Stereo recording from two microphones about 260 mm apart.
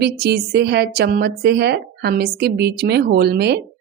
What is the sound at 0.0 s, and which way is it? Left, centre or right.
A woman's voice, right.